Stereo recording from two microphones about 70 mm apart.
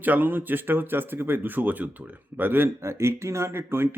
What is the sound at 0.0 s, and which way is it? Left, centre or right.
Speech, right.